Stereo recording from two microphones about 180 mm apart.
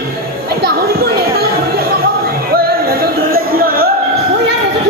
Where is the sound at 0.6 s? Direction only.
60° right (ahead or behind).